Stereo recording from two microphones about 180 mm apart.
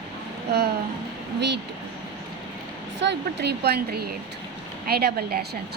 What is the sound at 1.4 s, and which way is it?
Speech, 70° right (ahead or behind).